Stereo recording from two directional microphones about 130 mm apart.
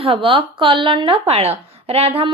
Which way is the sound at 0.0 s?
45° right (ahead or behind).